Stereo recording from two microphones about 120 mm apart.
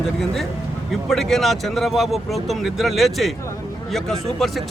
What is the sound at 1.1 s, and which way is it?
Speech, centre (ahead or behind).